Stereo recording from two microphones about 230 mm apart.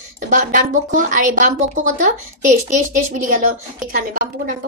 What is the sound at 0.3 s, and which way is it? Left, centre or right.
A woman's voice, right.